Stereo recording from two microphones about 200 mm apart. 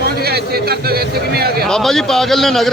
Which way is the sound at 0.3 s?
50° right (ahead or behind).